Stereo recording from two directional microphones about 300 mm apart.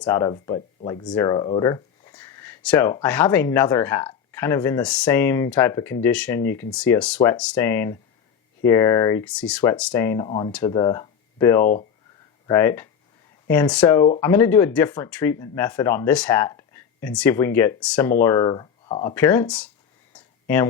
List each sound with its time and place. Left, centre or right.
0.0 s speech: centre
11.6 s speech: left
12.5 s speech: centre
20.1 s a sound: centre